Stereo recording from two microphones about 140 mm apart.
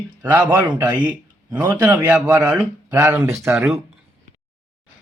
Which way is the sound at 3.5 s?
5° right (ahead or behind).